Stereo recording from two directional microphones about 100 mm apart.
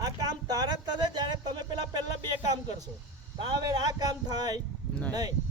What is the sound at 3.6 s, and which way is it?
A man's voice, 40° right (ahead or behind).